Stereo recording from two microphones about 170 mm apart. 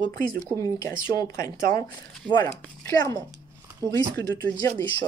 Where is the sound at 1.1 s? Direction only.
20° left (ahead or behind).